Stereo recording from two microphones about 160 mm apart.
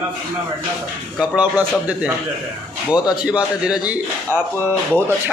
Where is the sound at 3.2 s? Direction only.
5° right (ahead or behind).